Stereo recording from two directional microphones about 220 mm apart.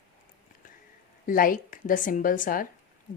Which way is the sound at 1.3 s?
40° left (ahead or behind).